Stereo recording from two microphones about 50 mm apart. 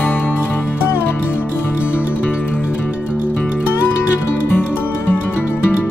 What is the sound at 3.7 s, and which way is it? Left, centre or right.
Music, left.